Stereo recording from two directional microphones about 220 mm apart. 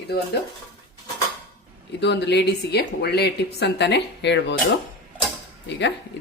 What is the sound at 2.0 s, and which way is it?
Speech, 50° left (ahead or behind).